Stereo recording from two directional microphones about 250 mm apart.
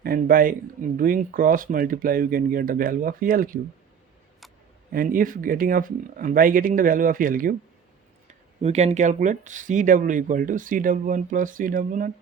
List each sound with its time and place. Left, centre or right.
0.0 s speech: right
4.9 s speech: right